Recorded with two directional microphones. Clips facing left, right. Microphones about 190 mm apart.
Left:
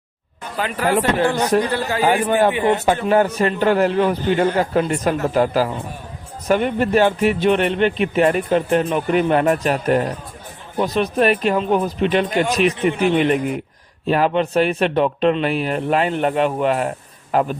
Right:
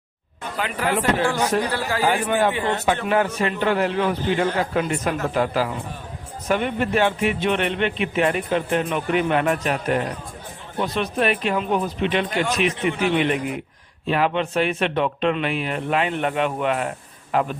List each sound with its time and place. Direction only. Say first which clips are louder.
0.6 s speech: left 4 dB; 45° left (ahead or behind)
1.7 s a man's voice: left 3 dB; 25° left (ahead or behind)
2.0 s a man's voice: left 4 dB; 40° left (ahead or behind)
2.5 s a man's voice: left 6 dB; 20° left (ahead or behind)
3.1 s a man's voice: left 7 dB; 40° left (ahead or behind)